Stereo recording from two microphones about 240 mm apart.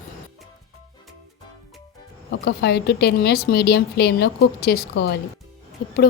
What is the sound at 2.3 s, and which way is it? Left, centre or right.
A woman's voice, left.